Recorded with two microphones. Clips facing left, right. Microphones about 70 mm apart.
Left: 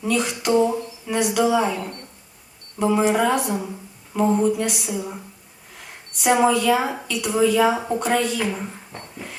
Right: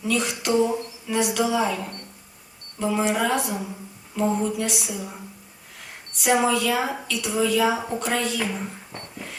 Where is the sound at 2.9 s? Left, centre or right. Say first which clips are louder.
Left 3 dB; centre.